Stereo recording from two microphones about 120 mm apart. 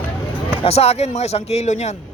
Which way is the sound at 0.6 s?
60° left (ahead or behind).